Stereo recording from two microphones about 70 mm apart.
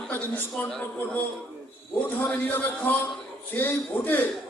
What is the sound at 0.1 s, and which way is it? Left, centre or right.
Speech, left.